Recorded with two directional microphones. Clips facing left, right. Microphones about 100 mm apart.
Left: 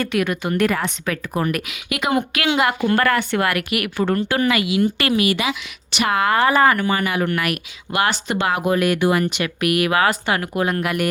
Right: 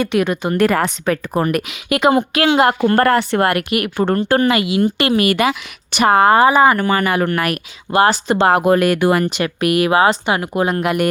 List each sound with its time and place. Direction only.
0.0 s a woman's voice: 25° right (ahead or behind)
5.1 s speech: 50° right (ahead or behind); by 6.5 s 30° right (ahead or behind)
6.5 s speech: 20° right (ahead or behind)
6.8 s a woman's voice: 50° right (ahead or behind); by 8.5 s 35° right (ahead or behind)
8.5 s a woman's voice: 55° right (ahead or behind); by 11.1 s 25° right (ahead or behind)